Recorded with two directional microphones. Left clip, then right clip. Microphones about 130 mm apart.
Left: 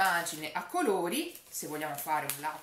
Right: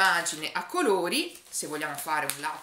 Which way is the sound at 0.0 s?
40° left (ahead or behind).